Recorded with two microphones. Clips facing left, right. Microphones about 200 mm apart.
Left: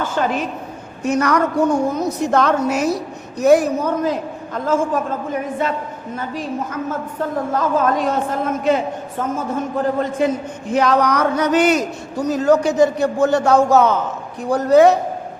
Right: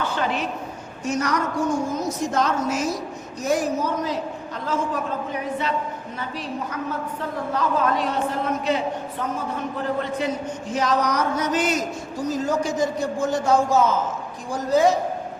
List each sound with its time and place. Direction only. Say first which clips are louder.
0.0 s a man's voice: left 5 dB; 45° left (ahead or behind)
1.0 s a woman's voice: left 7 dB; 60° left (ahead or behind)
10.7 s a man's voice: left 6 dB; 60° left (ahead or behind)